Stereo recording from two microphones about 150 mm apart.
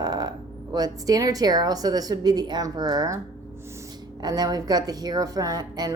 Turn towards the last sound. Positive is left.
turn(degrees=-25)  # may be behind; listen again after turning